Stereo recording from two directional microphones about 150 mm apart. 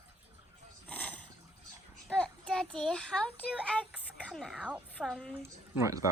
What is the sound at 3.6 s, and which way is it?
A child's voice, 5° left (ahead or behind).